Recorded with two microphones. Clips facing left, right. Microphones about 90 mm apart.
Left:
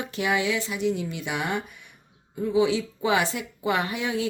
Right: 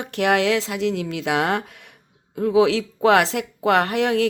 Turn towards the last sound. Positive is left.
turn(degrees=-70)  # may be behind; listen again after turning